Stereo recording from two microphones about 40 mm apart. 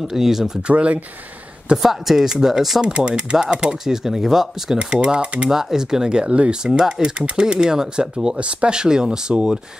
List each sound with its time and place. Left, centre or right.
0.1 s speech: centre
0.7 s speech: right
1.8 s speech: centre
2.8 s speech: right
3.8 s speech: centre
4.7 s speech: right
5.5 s speech: centre; by 6.5 s right
6.6 s speech: centre